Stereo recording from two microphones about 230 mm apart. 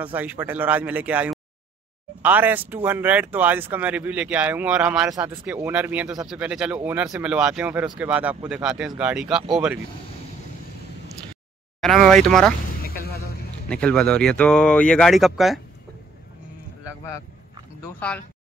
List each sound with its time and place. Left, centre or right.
0.0 s speech: centre
11.8 s speech: centre
12.8 s music: left
13.7 s speech: centre
17.8 s speech: centre